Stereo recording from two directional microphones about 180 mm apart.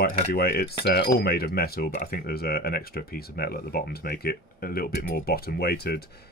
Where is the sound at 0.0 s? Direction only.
55° left (ahead or behind).